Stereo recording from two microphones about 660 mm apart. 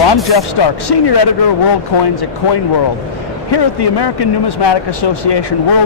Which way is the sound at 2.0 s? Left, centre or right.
Left.